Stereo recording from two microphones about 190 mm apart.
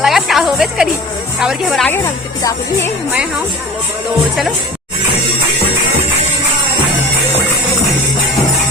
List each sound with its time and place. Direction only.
0.0 s music: centre (ahead or behind)
1.4 s a woman's voice: centre (ahead or behind)
1.9 s speech: 15° left (ahead or behind)